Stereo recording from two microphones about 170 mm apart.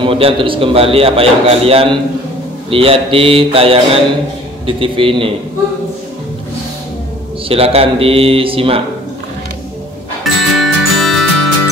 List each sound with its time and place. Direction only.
0.0 s a man's voice: 30° right (ahead or behind)
7.4 s a man's voice: 35° right (ahead or behind)
10.2 s music: centre (ahead or behind)